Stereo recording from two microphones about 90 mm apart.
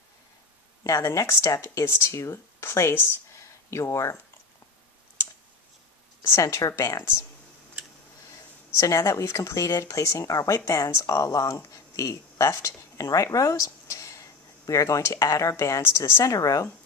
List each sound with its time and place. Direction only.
0.8 s speech: 35° left (ahead or behind)
6.2 s speech: 30° left (ahead or behind)
8.7 s speech: 35° left (ahead or behind)